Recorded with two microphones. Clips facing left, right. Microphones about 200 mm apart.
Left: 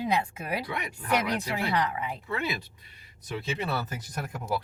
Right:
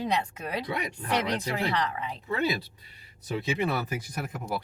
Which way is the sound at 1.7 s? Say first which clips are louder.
Left 2 dB; 10° left (ahead or behind).